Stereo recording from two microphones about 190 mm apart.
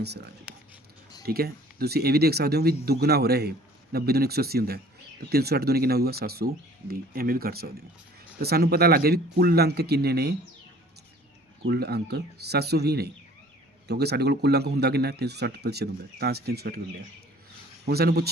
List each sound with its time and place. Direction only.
0.5 s writing: 5° right (ahead or behind)
1.2 s speech: 55° right (ahead or behind)
11.6 s speech: 60° right (ahead or behind)
17.8 s speech: 55° right (ahead or behind)